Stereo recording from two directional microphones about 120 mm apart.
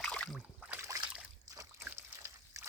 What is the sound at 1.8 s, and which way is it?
Slosh, 15° right (ahead or behind).